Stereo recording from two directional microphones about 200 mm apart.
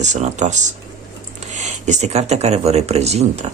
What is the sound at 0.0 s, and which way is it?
Speech, 35° right (ahead or behind).